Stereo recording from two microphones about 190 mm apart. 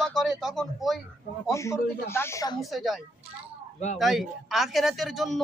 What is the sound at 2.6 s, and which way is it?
A man's voice, centre (ahead or behind).